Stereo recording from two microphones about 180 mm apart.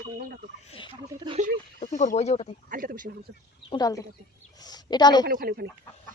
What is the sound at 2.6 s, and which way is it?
Speech, 50° right (ahead or behind).